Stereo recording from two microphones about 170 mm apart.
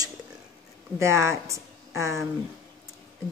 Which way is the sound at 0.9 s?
15° right (ahead or behind).